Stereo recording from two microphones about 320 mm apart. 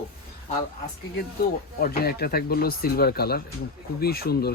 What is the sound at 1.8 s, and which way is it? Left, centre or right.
Speech, left.